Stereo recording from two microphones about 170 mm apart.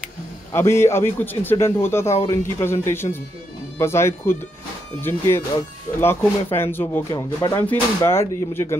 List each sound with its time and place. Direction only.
0.5 s a man's voice: 15° left (ahead or behind)
7.1 s speech: 25° left (ahead or behind)
7.6 s a man's voice: 10° left (ahead or behind)